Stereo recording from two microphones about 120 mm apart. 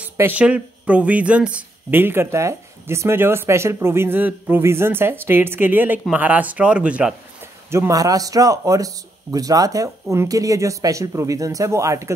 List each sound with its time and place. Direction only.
0.0 s speech: 15° right (ahead or behind)
7.7 s speech: 25° right (ahead or behind)